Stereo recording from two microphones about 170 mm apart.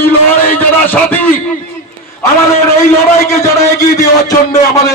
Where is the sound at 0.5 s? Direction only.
10° left (ahead or behind).